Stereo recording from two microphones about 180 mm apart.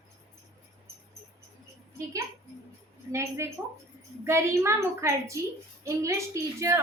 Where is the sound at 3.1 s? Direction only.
15° right (ahead or behind).